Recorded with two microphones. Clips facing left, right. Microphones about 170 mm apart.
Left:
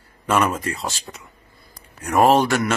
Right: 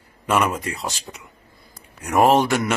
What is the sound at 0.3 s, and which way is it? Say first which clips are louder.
Speech: left 1 dB; 10° right (ahead or behind).